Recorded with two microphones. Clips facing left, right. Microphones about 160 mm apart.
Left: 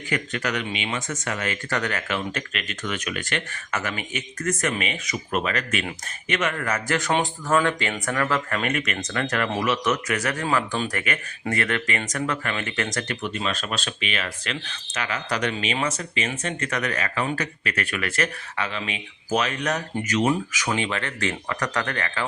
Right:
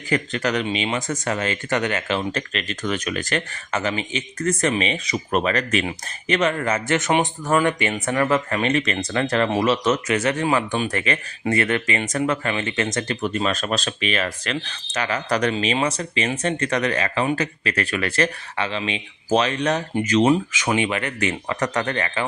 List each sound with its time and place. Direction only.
0.1 s speech: 30° right (ahead or behind)
13.2 s speech: 45° right (ahead or behind); by 22.2 s 20° right (ahead or behind)